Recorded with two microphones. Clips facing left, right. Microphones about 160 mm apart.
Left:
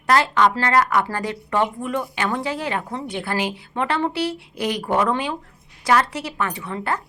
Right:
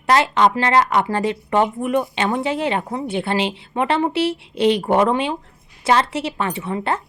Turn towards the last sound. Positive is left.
turn(degrees=-25)  # may be behind; listen again after turning